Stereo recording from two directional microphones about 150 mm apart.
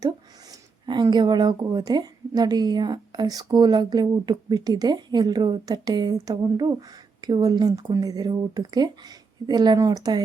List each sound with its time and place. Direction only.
0.9 s a woman's voice: 30° right (ahead or behind)